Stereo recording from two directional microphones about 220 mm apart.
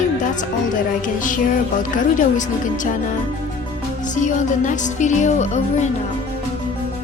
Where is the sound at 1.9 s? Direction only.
35° left (ahead or behind).